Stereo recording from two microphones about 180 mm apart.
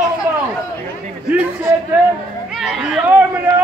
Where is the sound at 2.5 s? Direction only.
5° right (ahead or behind).